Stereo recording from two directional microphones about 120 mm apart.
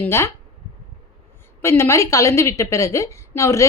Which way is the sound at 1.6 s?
20° left (ahead or behind).